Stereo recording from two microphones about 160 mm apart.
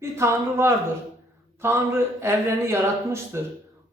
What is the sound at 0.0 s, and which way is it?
A man's voice, 15° right (ahead or behind).